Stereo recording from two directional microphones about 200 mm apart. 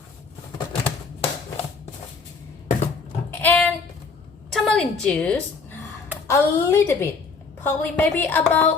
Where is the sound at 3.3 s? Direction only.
10° left (ahead or behind).